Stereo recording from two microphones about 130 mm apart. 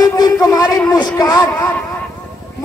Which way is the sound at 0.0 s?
30° left (ahead or behind).